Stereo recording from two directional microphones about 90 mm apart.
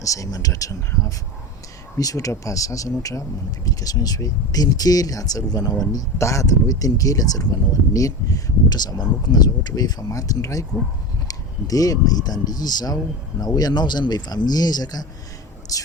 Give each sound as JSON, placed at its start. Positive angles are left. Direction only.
{"t": 0.0, "sound": "speech", "side_deg": 40}